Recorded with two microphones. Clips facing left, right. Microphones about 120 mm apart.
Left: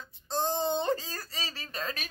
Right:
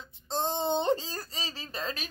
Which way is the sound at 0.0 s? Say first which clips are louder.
Even; 25° right (ahead or behind).